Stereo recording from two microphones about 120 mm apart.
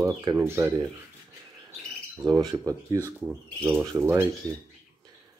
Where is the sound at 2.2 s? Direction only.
30° right (ahead or behind).